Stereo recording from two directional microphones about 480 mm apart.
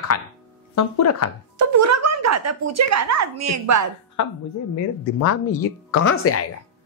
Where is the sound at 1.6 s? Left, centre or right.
Right.